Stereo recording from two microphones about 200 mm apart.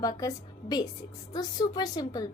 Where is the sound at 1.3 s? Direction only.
20° left (ahead or behind).